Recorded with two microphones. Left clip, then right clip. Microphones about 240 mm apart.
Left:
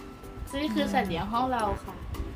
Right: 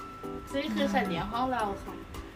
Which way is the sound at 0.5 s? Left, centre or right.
Left.